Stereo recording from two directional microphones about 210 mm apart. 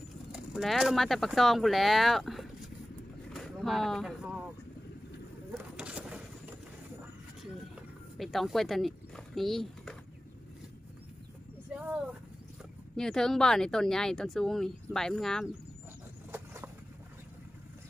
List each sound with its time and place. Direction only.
0.3 s speech: 5° right (ahead or behind)
3.3 s vehicle: centre (ahead or behind)
5.5 s vehicle: 5° right (ahead or behind)
8.2 s speech: centre (ahead or behind)
11.7 s a sound: 5° right (ahead or behind)
12.9 s speech: 5° left (ahead or behind)